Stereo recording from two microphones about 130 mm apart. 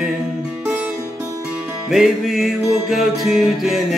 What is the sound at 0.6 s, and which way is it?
Music, 15° right (ahead or behind).